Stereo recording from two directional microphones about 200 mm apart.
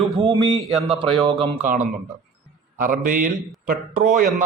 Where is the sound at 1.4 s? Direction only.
40° right (ahead or behind).